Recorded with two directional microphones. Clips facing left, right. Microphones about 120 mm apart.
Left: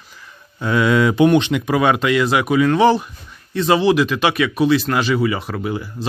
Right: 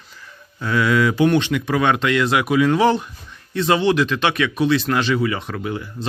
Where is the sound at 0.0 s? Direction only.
10° left (ahead or behind).